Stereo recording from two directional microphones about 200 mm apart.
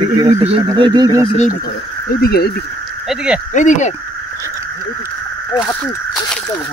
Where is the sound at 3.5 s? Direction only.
40° left (ahead or behind).